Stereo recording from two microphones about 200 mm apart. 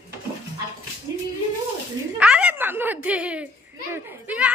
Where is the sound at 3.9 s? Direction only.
5° right (ahead or behind).